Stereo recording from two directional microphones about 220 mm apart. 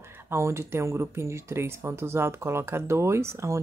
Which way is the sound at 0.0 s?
10° right (ahead or behind).